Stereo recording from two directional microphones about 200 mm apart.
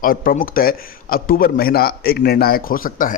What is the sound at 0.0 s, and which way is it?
A man's voice, 45° left (ahead or behind).